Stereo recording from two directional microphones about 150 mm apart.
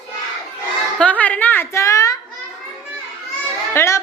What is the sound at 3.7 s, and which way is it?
Speech, 20° left (ahead or behind).